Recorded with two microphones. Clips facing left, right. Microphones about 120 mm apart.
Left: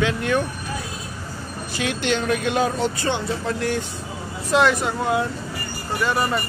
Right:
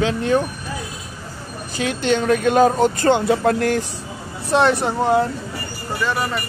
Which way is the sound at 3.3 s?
55° right (ahead or behind).